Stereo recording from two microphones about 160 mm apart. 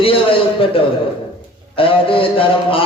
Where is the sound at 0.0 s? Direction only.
35° left (ahead or behind).